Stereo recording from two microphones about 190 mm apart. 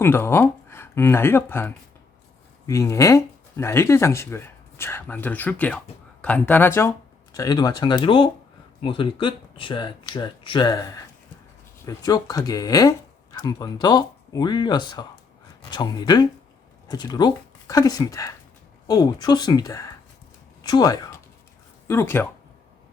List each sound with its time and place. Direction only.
0.0 s speech: 10° left (ahead or behind)